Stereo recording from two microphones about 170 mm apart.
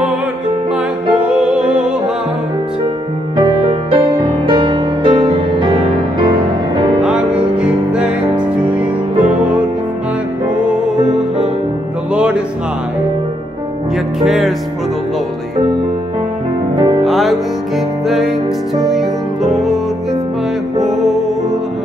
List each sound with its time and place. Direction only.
1.2 s music: 5° right (ahead or behind)
3.9 s music: 30° right (ahead or behind)
7.0 s music: 5° right (ahead or behind)
12.1 s music: 5° right (ahead or behind)
14.2 s music: centre (ahead or behind)
16.7 s music: 30° right (ahead or behind)
17.0 s music: centre (ahead or behind)
20.9 s music: centre (ahead or behind)